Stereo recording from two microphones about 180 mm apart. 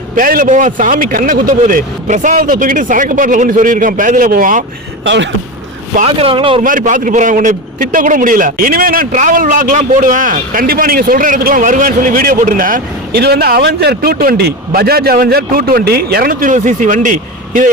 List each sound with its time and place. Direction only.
0.2 s a man's voice: 50° right (ahead or behind)
5.0 s speech: 90° right
6.0 s speech: 30° right (ahead or behind)
6.6 s a man's voice: 50° right (ahead or behind)